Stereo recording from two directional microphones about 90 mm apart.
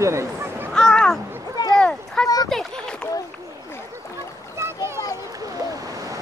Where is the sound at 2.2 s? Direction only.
45° left (ahead or behind).